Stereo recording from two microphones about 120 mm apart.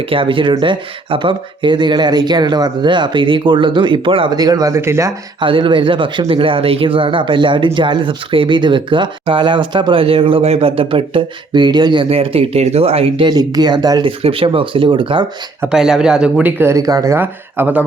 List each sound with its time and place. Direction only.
0.1 s speech: 45° right (ahead or behind)
4.4 s speech: 30° right (ahead or behind)
5.4 s speech: 45° right (ahead or behind)
12.0 s speech: 55° right (ahead or behind); by 14.0 s 35° right (ahead or behind)
14.0 s speech: 50° right (ahead or behind)
15.7 s a man's voice: 5° right (ahead or behind)
16.6 s speech: 25° right (ahead or behind)
17.2 s speech: 15° right (ahead or behind)